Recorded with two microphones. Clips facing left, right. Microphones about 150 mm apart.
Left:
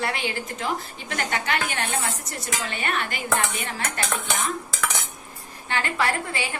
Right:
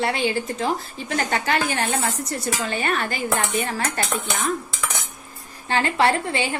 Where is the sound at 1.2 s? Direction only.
35° right (ahead or behind).